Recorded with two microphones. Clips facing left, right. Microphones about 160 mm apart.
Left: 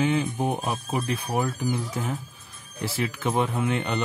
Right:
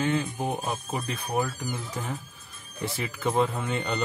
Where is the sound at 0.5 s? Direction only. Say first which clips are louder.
Left 3 dB; centre (ahead or behind).